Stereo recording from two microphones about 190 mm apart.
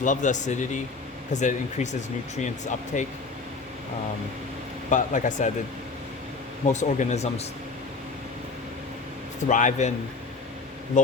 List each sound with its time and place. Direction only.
0.0 s speech: 40° left (ahead or behind)
4.9 s speech: 40° left (ahead or behind)
6.7 s speech: 40° left (ahead or behind)
9.5 s speech: 40° left (ahead or behind)
10.9 s speech: 40° left (ahead or behind)